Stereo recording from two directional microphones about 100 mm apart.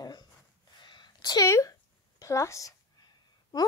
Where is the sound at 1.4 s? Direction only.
30° left (ahead or behind).